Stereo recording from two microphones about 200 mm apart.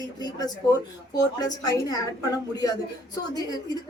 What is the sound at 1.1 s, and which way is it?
Speech, 20° left (ahead or behind).